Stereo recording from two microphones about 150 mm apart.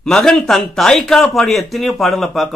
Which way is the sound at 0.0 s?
5° left (ahead or behind).